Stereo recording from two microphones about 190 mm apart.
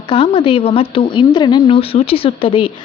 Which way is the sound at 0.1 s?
30° left (ahead or behind).